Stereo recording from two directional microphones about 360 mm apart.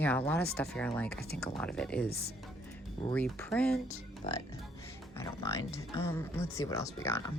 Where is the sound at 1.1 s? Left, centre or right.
Left.